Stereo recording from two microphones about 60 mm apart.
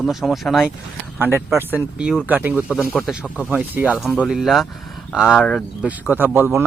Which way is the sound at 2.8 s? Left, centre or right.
Left.